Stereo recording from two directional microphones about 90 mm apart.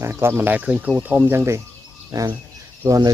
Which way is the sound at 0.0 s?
30° right (ahead or behind).